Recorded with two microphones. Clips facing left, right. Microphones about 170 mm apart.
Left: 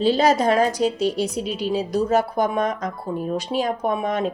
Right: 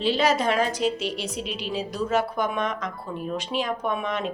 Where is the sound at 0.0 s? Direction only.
40° left (ahead or behind).